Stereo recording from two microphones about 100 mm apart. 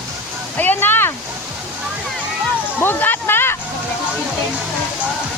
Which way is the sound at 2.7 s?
20° left (ahead or behind).